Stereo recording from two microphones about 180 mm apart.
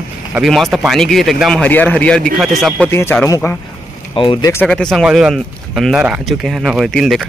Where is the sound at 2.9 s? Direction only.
15° left (ahead or behind).